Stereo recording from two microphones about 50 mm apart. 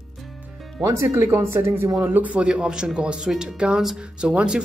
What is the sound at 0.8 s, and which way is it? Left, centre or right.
Speech, right.